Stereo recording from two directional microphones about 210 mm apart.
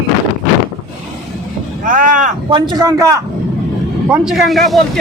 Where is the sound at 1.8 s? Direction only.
40° right (ahead or behind).